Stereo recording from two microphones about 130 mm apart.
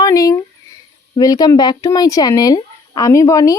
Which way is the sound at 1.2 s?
30° left (ahead or behind).